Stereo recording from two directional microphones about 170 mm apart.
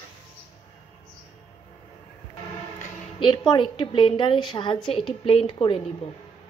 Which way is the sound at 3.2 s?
25° left (ahead or behind).